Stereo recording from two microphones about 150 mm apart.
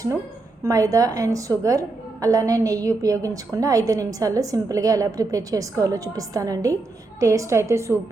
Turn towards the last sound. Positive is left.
turn(degrees=-20)  # may be behind; listen again after turning